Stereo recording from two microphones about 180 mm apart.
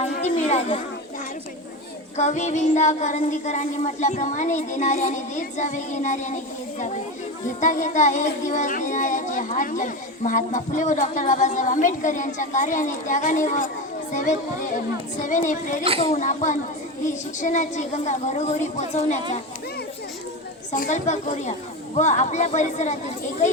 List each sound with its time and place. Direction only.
0.0 s a sound: 40° left (ahead or behind)
2.1 s child singing: 40° left (ahead or behind)
7.4 s speech: 45° left (ahead or behind)
16.0 s child singing: 35° left (ahead or behind)
20.7 s speech: 45° left (ahead or behind)
21.9 s child singing: 40° left (ahead or behind)